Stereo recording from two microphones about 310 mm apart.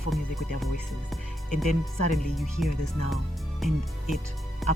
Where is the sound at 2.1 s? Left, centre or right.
Centre.